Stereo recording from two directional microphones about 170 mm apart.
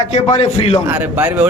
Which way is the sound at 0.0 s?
40° left (ahead or behind).